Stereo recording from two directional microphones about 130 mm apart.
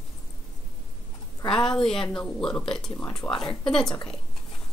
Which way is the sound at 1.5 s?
5° left (ahead or behind).